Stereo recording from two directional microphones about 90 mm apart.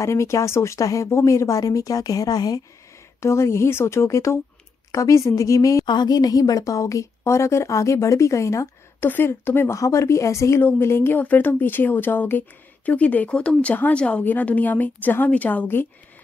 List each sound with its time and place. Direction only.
0.0 s a woman's voice: 35° left (ahead or behind)
3.2 s a woman's voice: 30° left (ahead or behind)
5.9 s a woman's voice: 50° left (ahead or behind); by 8.6 s 35° left (ahead or behind)
9.0 s a woman's voice: 25° left (ahead or behind)
9.8 s a woman's voice: 35° left (ahead or behind)